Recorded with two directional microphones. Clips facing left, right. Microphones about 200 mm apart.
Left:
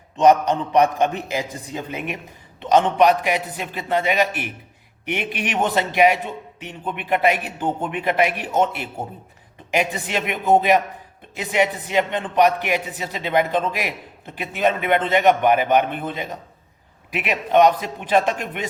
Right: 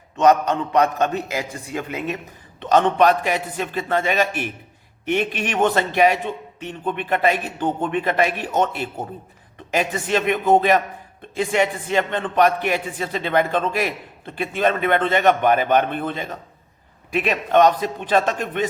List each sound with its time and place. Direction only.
0.2 s a man's voice: 15° left (ahead or behind)